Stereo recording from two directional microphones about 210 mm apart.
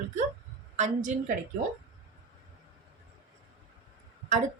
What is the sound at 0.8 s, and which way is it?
Speech, 35° right (ahead or behind).